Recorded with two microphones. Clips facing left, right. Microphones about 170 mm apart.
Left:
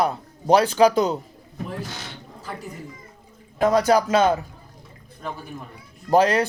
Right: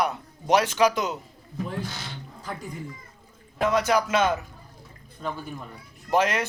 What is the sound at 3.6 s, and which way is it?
Speech, 35° left (ahead or behind).